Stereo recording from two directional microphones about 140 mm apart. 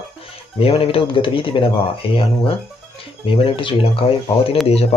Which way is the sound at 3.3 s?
40° left (ahead or behind).